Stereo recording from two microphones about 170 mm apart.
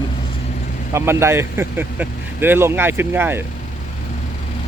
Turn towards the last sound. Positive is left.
turn(degrees=-15)  # may be behind; listen again after turning